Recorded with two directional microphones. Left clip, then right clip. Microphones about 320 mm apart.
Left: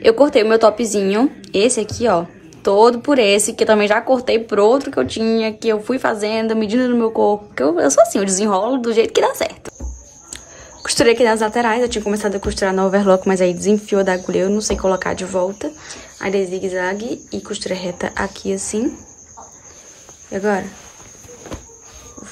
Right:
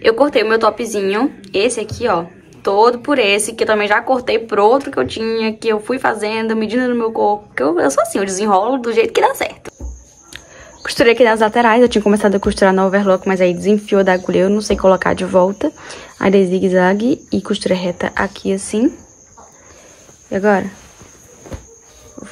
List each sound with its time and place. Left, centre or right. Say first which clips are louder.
0.0 s a woman's voice: left 1 dB; centre
20.2 s a woman's voice: right 5 dB; centre